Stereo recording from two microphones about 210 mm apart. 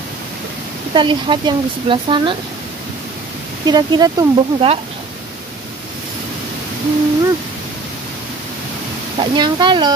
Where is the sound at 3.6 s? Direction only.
20° right (ahead or behind).